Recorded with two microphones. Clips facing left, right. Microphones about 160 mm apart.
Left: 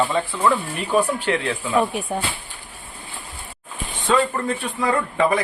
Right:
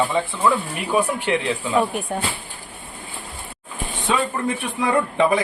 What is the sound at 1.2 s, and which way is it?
Speech, 15° right (ahead or behind).